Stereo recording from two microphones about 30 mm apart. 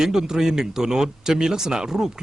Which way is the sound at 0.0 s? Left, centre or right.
Centre.